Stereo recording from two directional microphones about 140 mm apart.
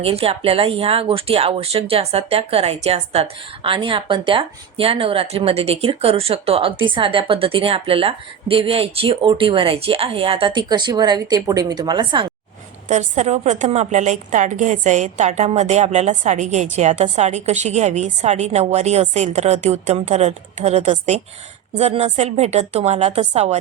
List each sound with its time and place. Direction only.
0.0 s speech: 45° right (ahead or behind)
12.9 s a woman's voice: 55° right (ahead or behind)